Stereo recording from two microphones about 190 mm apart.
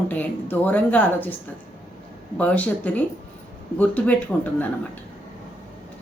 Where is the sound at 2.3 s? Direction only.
10° left (ahead or behind).